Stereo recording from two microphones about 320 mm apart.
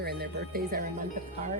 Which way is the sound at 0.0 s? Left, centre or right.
Right.